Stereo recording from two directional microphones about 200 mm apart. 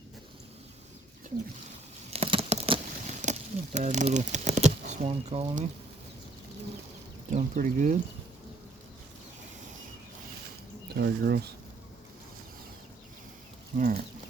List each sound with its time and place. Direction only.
2.0 s a sound: 30° right (ahead or behind)
7.3 s speech: 40° right (ahead or behind)
10.9 s speech: 55° right (ahead or behind)
13.7 s speech: 50° right (ahead or behind)